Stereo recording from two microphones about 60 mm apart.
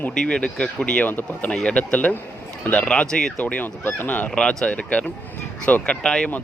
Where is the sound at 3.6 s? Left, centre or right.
Left.